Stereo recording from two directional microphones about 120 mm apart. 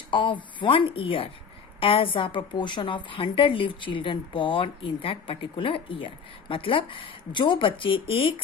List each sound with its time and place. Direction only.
0.1 s a woman's voice: 45° left (ahead or behind)